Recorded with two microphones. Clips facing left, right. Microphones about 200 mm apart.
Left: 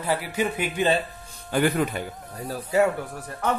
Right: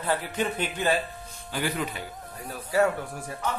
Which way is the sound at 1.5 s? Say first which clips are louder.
Left 7 dB; 50° left (ahead or behind).